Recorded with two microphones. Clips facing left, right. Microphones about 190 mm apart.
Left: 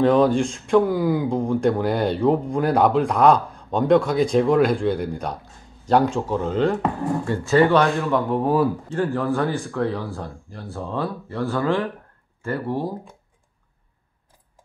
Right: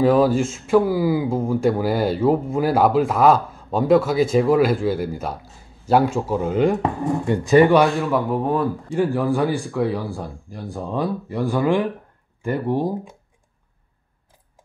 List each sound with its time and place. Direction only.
0.0 s speech: 5° right (ahead or behind)
8.8 s speech: 10° right (ahead or behind)